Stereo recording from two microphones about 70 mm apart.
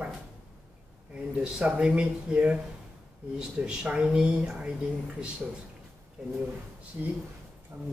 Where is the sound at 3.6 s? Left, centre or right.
Centre.